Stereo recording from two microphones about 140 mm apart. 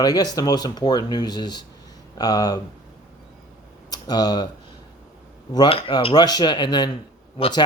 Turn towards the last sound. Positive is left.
turn(degrees=30)  # may be behind; listen again after turning